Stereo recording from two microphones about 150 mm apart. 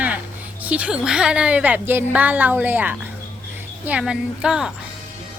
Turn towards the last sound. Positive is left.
turn(degrees=-5)  # may be behind; listen again after turning